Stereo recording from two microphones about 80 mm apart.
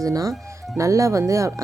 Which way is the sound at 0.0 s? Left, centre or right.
Right.